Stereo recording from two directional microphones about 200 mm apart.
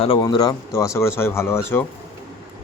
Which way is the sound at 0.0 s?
25° left (ahead or behind).